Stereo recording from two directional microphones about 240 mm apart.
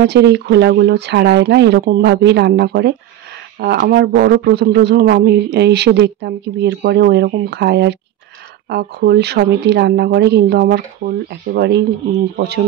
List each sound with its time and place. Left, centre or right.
0.0 s speech: right